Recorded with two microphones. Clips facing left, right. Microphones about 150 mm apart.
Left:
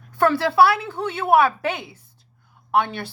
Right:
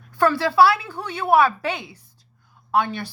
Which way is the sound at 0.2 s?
55° left (ahead or behind).